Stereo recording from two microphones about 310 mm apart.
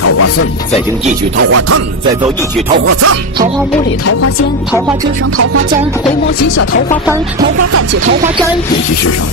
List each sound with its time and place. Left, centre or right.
0.0 s music: left
1.4 s music: right
2.8 s music: right
4.0 s music: left
7.7 s music: right